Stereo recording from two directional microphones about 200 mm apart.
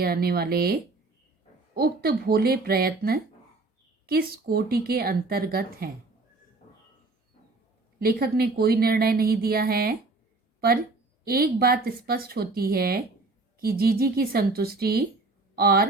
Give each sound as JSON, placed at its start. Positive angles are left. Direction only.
{"t": 0.0, "sound": "speech", "side_deg": -50}
{"t": 7.9, "sound": "speech", "side_deg": -50}
{"t": 11.3, "sound": "speech", "side_deg": -50}